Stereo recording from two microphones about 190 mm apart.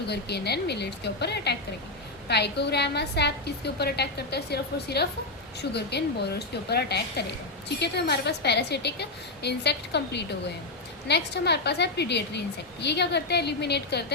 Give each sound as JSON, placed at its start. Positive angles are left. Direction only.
{"t": 0.1, "sound": "a woman's voice", "side_deg": 60}